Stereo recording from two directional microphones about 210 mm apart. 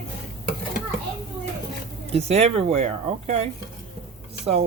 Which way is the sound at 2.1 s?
30° right (ahead or behind).